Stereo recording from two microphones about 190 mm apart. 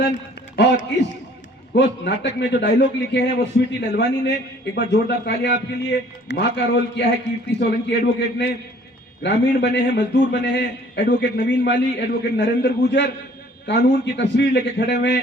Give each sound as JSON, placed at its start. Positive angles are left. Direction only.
{"t": 0.5, "sound": "a man's voice", "side_deg": 70}
{"t": 10.6, "sound": "a man's voice", "side_deg": 55}